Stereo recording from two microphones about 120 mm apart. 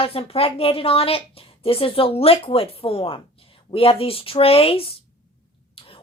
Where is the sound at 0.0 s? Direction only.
55° left (ahead or behind).